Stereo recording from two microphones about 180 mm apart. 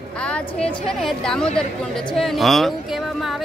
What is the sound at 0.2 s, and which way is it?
Speech, 5° left (ahead or behind).